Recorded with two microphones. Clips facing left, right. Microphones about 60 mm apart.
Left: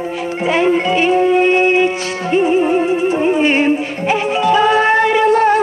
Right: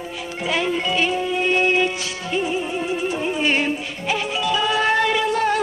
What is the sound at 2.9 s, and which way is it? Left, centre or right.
Music, left.